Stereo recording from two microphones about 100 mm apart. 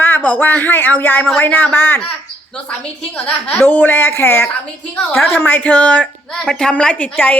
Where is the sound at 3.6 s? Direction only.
20° left (ahead or behind).